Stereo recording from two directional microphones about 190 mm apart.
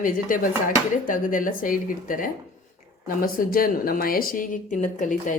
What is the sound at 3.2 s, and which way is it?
A woman's voice, 50° left (ahead or behind).